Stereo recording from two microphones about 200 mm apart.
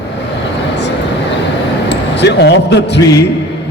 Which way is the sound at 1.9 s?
60° left (ahead or behind).